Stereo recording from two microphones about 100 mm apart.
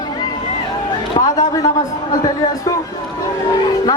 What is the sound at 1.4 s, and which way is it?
Speech, 40° left (ahead or behind).